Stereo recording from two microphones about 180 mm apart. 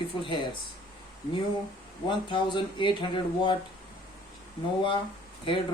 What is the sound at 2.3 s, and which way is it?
Speech, 25° left (ahead or behind).